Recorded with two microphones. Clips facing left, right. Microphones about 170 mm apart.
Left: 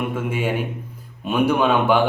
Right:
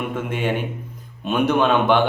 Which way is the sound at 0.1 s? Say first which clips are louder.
Even; 5° left (ahead or behind).